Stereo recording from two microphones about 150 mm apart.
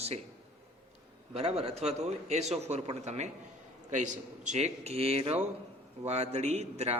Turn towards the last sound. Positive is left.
turn(degrees=-45)  # may be behind; listen again after turning